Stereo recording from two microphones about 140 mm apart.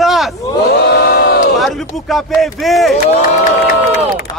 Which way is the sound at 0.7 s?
90° left.